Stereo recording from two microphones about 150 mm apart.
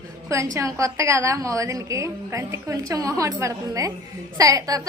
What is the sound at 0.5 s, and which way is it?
A woman's voice, 20° right (ahead or behind).